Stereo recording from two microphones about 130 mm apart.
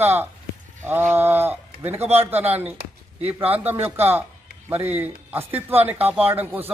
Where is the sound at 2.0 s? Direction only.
55° right (ahead or behind).